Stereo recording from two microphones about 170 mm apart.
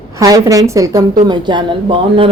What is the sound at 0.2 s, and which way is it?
A man's voice, 20° right (ahead or behind).